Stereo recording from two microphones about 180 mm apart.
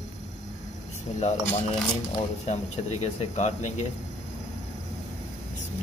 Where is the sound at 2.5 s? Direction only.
40° left (ahead or behind).